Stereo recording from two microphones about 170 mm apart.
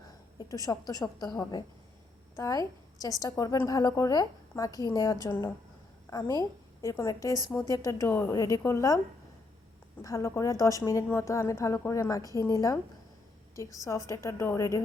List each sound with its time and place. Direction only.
0.5 s a woman's voice: 20° left (ahead or behind)
10.0 s a woman's voice: 20° left (ahead or behind)